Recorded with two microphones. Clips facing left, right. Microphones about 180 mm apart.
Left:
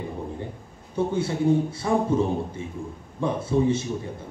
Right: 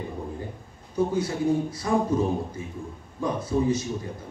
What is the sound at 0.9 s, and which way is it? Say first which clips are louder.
A man's voice: even; 30° left (ahead or behind).